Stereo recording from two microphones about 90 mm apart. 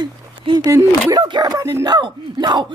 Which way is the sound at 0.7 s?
35° right (ahead or behind).